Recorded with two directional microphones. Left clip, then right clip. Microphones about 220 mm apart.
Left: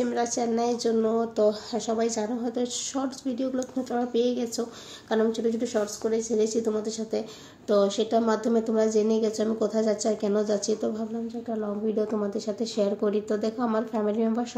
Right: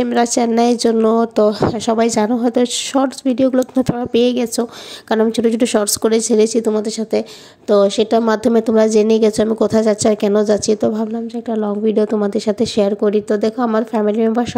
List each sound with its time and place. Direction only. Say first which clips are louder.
0.0 s speech: right 11 dB; 40° right (ahead or behind)